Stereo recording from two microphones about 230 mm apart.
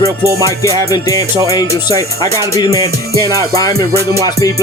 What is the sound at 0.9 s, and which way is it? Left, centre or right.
Speech, centre.